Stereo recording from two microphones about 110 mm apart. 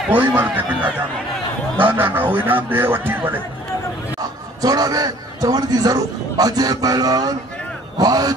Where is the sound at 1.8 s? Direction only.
20° right (ahead or behind).